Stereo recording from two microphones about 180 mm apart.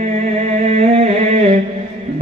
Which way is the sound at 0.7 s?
35° right (ahead or behind).